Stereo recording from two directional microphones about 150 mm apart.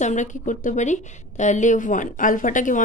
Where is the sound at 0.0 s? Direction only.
55° left (ahead or behind).